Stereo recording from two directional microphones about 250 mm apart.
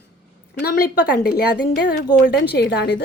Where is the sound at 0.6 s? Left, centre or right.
Left.